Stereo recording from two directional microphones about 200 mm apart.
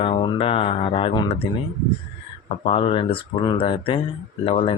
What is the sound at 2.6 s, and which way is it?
Speech, 25° left (ahead or behind).